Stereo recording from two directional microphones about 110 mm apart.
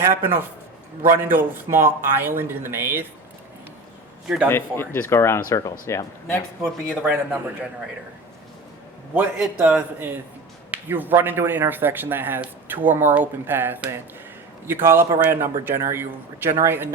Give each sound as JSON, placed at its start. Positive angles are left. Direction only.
{"t": 0.2, "sound": "speech", "side_deg": -20}
{"t": 4.4, "sound": "speech", "side_deg": 20}
{"t": 6.6, "sound": "speech", "side_deg": -5}
{"t": 9.6, "sound": "speech", "side_deg": -15}